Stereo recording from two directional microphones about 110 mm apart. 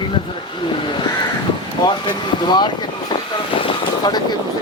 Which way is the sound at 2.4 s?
45° left (ahead or behind).